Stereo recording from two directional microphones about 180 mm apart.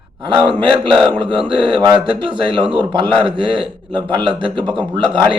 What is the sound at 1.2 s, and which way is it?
A man's voice, 25° right (ahead or behind).